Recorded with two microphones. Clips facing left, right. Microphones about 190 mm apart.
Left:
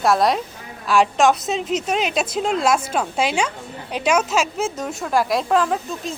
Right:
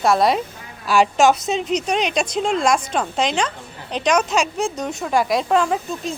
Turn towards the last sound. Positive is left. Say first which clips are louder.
# right 1 dB
turn(degrees=0)  # may be behind; listen again after turning